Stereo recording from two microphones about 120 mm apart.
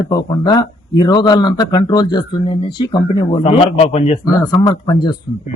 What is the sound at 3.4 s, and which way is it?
Speech, 55° left (ahead or behind).